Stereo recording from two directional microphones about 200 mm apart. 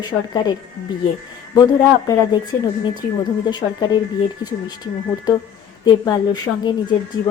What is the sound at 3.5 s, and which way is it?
Speech, 20° left (ahead or behind).